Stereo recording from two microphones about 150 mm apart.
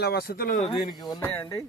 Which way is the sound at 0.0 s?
90° left.